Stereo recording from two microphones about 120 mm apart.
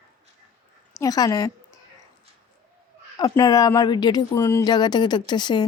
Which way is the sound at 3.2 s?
30° left (ahead or behind).